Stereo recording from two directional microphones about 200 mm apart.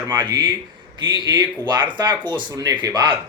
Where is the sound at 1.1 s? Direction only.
20° right (ahead or behind).